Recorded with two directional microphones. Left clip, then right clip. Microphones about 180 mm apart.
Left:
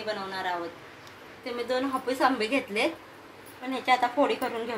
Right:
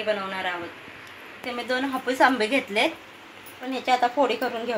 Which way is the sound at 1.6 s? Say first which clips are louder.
Right 2 dB; 50° right (ahead or behind).